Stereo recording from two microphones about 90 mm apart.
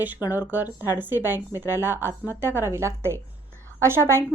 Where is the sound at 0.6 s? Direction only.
45° left (ahead or behind).